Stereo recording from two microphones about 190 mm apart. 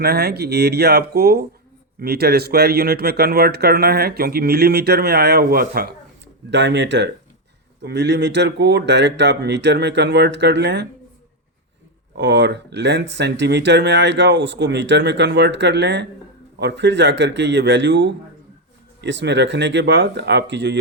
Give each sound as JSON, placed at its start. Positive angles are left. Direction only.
{"t": 0.0, "sound": "a man's voice", "side_deg": -55}
{"t": 6.5, "sound": "a man's voice", "side_deg": -65}
{"t": 12.1, "sound": "a man's voice", "side_deg": -65}